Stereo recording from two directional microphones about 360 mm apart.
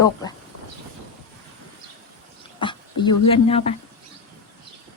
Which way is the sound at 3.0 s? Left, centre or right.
Centre.